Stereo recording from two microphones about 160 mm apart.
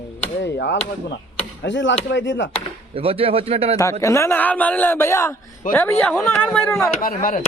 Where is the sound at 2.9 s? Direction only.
35° right (ahead or behind).